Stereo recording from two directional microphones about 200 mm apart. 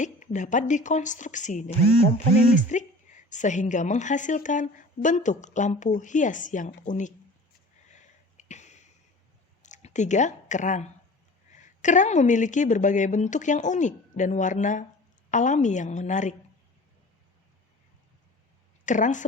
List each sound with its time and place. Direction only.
0.0 s a woman's voice: 40° left (ahead or behind)
7.9 s a sound: 35° left (ahead or behind)
9.6 s a woman's voice: 35° left (ahead or behind)
18.9 s a woman's voice: 40° left (ahead or behind)